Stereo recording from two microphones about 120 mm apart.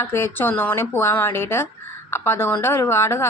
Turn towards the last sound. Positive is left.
turn(degrees=20)  # may be behind; listen again after turning